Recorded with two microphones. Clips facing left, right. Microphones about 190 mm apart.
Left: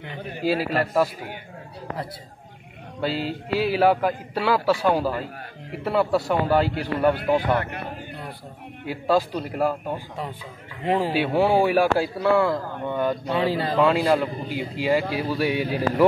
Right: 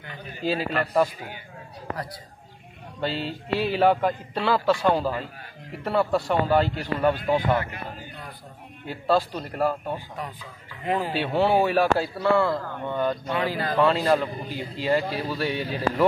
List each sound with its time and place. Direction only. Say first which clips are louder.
0.4 s a man's voice: left 3 dB; 5° left (ahead or behind)
3.0 s a man's voice: left 3 dB; 10° left (ahead or behind)
8.8 s a man's voice: left 1 dB; 10° left (ahead or behind)
10.9 s speech: left 4 dB; 30° left (ahead or behind)
11.1 s a man's voice: left 1 dB; 10° left (ahead or behind)
13.3 s speech: left 3 dB; 30° left (ahead or behind)
13.7 s a man's voice: left 1 dB; 10° left (ahead or behind)